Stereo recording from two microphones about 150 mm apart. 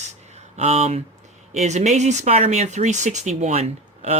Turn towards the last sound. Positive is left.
turn(degrees=-45)  # may be behind; listen again after turning